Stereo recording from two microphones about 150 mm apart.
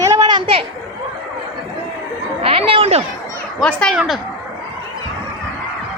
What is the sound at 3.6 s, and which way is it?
Speech, 5° left (ahead or behind).